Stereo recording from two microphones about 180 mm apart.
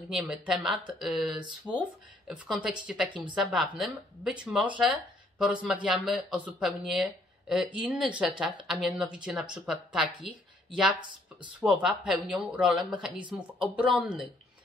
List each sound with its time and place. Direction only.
0.1 s speech: 5° right (ahead or behind)
11.0 s speech: 25° right (ahead or behind)
11.6 s speech: 5° right (ahead or behind)